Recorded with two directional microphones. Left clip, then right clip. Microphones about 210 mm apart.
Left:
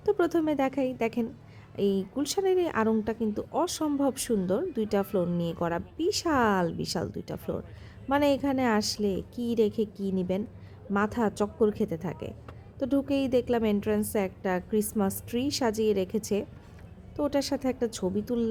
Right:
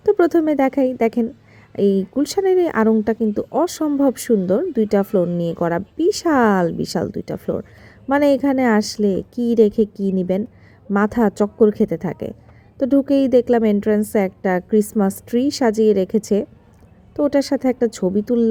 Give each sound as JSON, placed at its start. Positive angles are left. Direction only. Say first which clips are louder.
{"t": 0.0, "sound": "speech", "louder": "right 10 dB", "side_deg": -20}